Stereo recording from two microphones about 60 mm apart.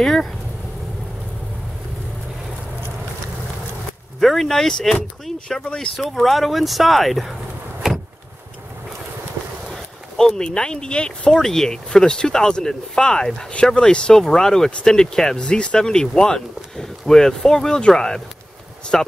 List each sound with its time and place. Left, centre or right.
0.0 s speech: centre
4.2 s speech: centre
5.6 s speech: centre
5.9 s speech: centre
7.8 s vehicle: centre
10.1 s speech: centre